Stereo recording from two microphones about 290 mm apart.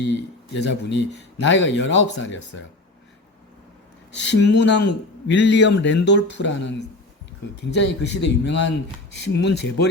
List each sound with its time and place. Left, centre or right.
0.5 s speech: left
4.2 s speech: left